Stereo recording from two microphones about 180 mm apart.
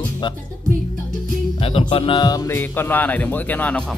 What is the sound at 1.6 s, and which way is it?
Speech, 30° left (ahead or behind).